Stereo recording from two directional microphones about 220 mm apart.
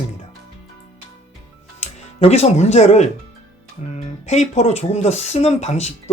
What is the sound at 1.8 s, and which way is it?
Speech, 30° left (ahead or behind).